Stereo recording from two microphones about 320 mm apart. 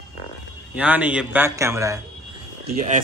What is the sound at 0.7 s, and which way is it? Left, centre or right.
A man's voice, centre.